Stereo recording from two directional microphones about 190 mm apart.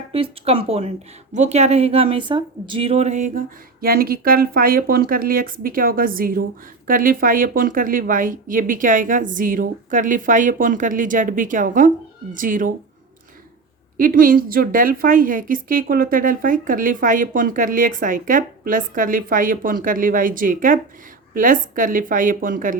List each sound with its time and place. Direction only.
0.1 s a woman's voice: 30° right (ahead or behind); by 12.7 s 45° right (ahead or behind)
13.9 s a woman's voice: 50° right (ahead or behind)